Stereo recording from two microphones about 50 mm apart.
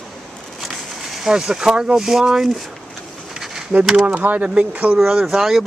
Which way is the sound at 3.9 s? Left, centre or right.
Right.